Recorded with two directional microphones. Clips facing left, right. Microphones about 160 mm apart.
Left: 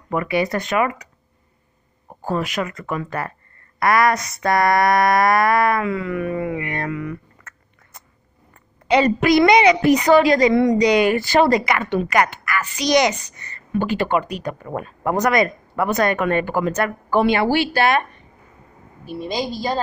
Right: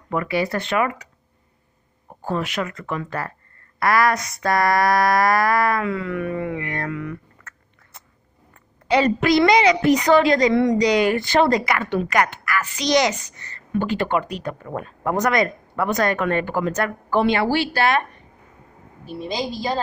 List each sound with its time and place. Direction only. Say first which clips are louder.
0.1 s a woman's voice: left 2 dB; 15° left (ahead or behind)
0.7 s a woman's voice: left 1 dB; 5° left (ahead or behind)
2.2 s a woman's voice: left 2 dB; 10° left (ahead or behind)
4.1 s a woman's voice: left 2 dB; centre (ahead or behind)
4.4 s a sound: left 2 dB; 20° left (ahead or behind)
8.8 s a woman's voice: left 2 dB; 10° left (ahead or behind)
19.0 s a woman's voice: left 2 dB; 5° left (ahead or behind)